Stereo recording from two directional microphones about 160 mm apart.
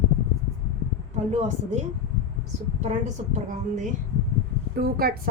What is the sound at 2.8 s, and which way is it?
A woman's voice, 50° right (ahead or behind).